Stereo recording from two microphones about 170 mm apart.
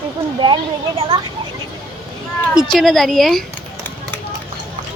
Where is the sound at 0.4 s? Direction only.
30° right (ahead or behind).